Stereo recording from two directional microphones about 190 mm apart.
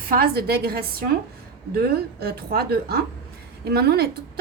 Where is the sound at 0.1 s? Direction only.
55° right (ahead or behind).